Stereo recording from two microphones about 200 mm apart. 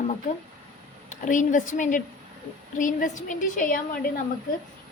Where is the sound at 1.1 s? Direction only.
40° left (ahead or behind).